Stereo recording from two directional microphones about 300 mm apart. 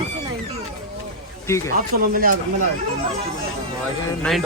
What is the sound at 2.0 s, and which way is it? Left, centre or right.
Speech, right.